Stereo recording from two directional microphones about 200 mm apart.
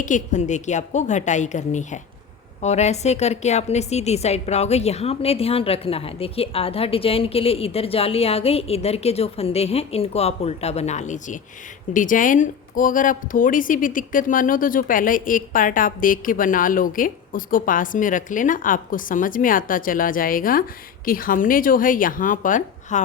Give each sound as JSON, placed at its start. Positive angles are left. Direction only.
{"t": 0.0, "sound": "a woman's voice", "side_deg": 40}